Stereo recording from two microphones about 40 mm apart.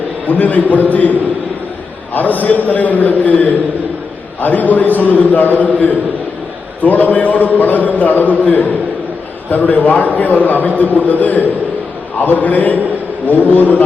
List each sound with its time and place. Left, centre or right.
0.3 s a man's voice: left
2.1 s a man's voice: left